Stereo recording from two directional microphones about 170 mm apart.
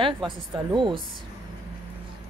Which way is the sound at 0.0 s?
30° right (ahead or behind).